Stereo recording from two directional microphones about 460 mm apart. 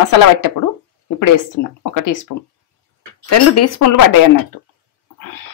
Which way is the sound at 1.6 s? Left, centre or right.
Left.